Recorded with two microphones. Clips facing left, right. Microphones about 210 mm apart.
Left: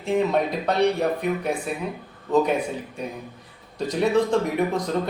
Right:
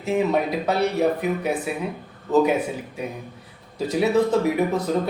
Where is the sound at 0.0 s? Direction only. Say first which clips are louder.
Even; 5° right (ahead or behind).